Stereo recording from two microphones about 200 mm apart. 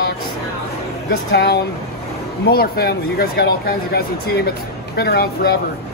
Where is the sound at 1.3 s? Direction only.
60° left (ahead or behind).